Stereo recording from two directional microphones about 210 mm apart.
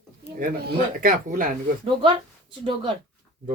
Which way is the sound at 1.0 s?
40° right (ahead or behind).